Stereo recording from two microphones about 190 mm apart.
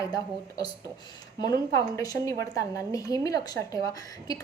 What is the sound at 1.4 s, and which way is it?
A woman's voice, 20° left (ahead or behind).